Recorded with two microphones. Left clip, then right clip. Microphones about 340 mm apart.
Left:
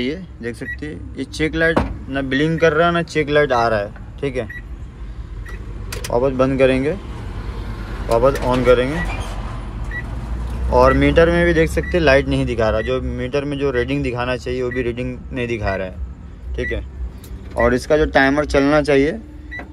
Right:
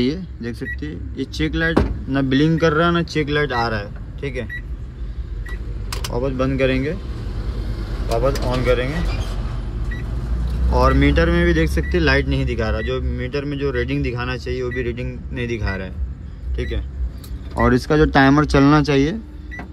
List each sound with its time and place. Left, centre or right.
0.0 s speech: centre
6.1 s speech: centre
8.6 s speech: centre
10.7 s speech: centre
17.6 s speech: centre